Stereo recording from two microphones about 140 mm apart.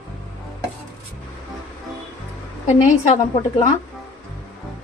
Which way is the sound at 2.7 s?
45° left (ahead or behind).